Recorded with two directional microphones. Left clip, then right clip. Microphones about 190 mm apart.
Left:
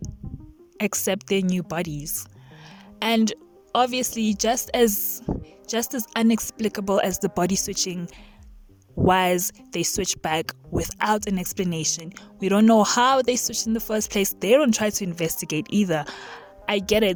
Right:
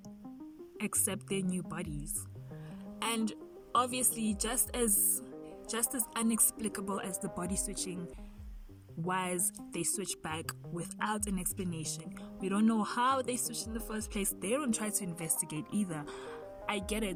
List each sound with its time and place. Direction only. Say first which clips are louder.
0.8 s speech: left 13 dB; 50° left (ahead or behind)
3.0 s speech: left 13 dB; 50° left (ahead or behind)
9.0 s speech: left 15 dB; 55° left (ahead or behind)